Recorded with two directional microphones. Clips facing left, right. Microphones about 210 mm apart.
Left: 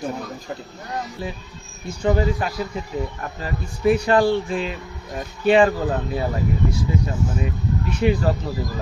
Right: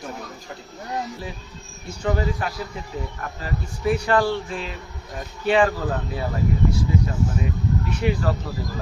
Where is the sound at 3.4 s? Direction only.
20° left (ahead or behind).